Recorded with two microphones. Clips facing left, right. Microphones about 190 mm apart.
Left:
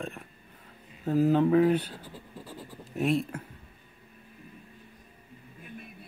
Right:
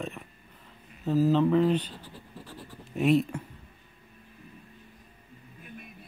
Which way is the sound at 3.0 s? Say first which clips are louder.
Right 4 dB; centre (ahead or behind).